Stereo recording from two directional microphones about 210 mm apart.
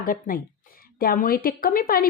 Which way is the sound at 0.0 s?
40° left (ahead or behind).